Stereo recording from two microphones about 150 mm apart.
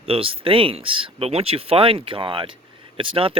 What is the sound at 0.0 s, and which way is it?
Speech, 40° right (ahead or behind).